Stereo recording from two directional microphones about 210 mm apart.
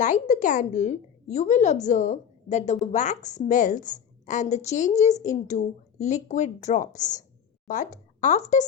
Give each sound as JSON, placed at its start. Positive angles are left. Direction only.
{"t": 0.0, "sound": "a woman's voice", "side_deg": 35}